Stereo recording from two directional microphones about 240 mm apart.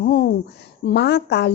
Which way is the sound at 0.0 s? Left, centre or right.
Left.